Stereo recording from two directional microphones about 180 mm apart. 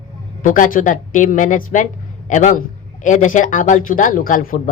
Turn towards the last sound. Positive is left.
turn(degrees=50)  # may be behind; listen again after turning